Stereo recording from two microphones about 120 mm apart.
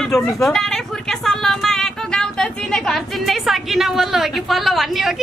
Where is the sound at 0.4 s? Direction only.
5° left (ahead or behind).